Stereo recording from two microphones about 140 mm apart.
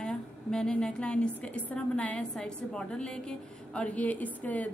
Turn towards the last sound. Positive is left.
turn(degrees=10)  # may be behind; listen again after turning